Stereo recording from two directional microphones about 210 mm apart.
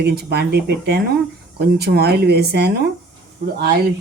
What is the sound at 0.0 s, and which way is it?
Speech, 50° right (ahead or behind).